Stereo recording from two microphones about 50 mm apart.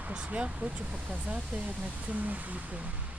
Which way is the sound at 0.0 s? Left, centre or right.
Right.